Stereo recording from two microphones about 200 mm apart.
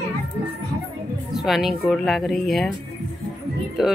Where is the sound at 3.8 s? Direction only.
Centre (ahead or behind).